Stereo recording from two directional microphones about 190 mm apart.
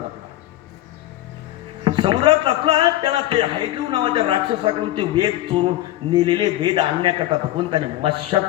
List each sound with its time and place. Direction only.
1.8 s a man's voice: 25° right (ahead or behind)